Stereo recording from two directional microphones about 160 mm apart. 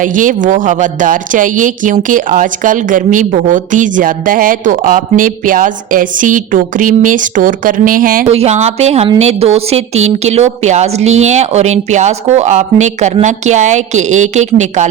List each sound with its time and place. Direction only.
0.0 s speech: 55° right (ahead or behind)
8.3 s a woman's voice: 40° right (ahead or behind)